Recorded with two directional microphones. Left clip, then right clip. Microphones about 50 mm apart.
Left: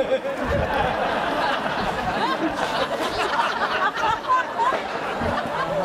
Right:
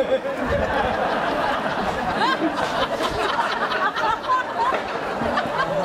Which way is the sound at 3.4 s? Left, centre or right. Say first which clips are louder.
Even; centre.